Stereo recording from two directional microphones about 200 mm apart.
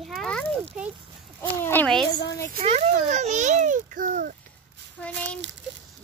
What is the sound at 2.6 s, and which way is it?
A child's voice, 35° right (ahead or behind).